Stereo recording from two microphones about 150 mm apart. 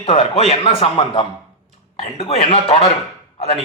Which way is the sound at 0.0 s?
40° left (ahead or behind).